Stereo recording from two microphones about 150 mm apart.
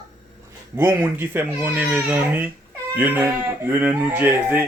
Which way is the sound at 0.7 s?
15° right (ahead or behind).